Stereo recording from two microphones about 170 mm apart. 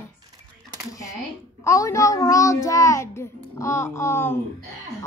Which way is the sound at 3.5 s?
15° left (ahead or behind).